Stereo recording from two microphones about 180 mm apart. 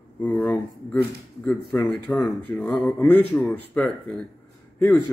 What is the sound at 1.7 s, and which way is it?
A man's voice, 5° left (ahead or behind).